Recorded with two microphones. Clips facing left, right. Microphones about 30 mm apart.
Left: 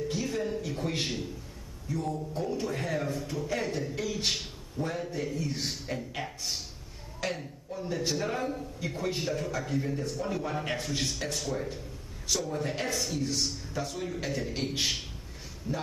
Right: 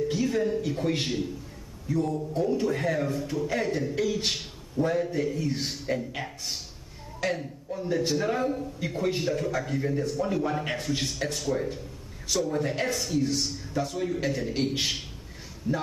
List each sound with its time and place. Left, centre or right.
0.1 s a man's voice: centre